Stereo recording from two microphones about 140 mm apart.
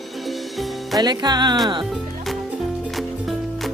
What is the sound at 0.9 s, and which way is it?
Speech, 30° right (ahead or behind).